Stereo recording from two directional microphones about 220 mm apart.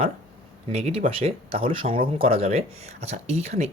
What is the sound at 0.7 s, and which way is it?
Speech, 30° right (ahead or behind).